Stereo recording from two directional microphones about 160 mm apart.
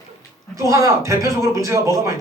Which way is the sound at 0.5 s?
20° right (ahead or behind).